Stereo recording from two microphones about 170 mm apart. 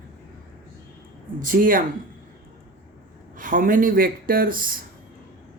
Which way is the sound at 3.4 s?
55° right (ahead or behind).